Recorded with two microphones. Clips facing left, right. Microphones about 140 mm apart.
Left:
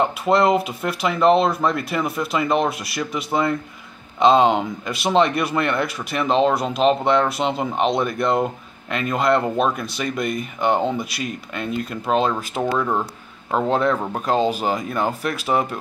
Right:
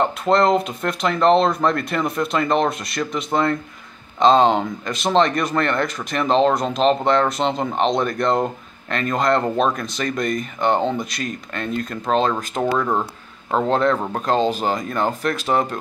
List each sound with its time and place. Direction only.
0.0 s speech: 5° left (ahead or behind)